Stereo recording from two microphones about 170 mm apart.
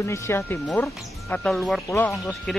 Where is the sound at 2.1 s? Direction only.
Centre (ahead or behind).